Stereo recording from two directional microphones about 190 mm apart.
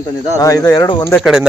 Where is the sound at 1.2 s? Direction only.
5° right (ahead or behind).